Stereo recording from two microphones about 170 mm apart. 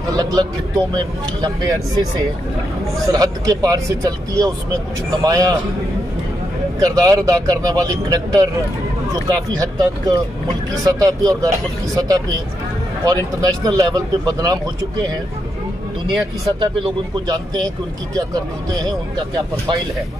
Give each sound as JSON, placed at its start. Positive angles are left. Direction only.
{"t": 0.1, "sound": "speech", "side_deg": -25}
{"t": 3.1, "sound": "speech", "side_deg": -20}
{"t": 6.8, "sound": "speech", "side_deg": -20}
{"t": 16.1, "sound": "speech", "side_deg": -25}
{"t": 18.9, "sound": "speech", "side_deg": -25}